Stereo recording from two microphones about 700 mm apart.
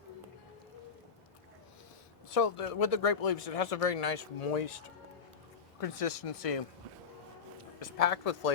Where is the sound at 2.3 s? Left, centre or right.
Left.